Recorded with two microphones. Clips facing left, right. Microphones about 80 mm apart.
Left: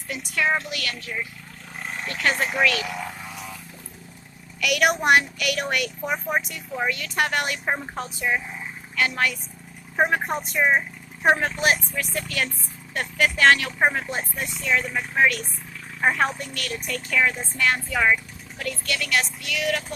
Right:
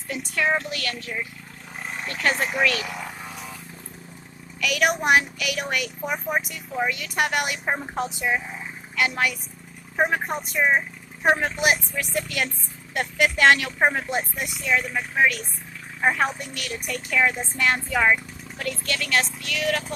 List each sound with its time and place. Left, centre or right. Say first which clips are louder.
0.7 s speech: right 1 dB; right
4.6 s a woman's voice: left 1 dB; centre
7.9 s a woman's voice: right 1 dB; centre
10.0 s a woman's voice: left 1 dB; centre
14.7 s a woman's voice: even; centre; by 18.1 s right
18.6 s speech: even; right